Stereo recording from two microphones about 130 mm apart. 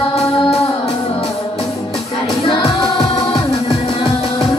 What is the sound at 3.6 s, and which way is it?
Music, 45° left (ahead or behind).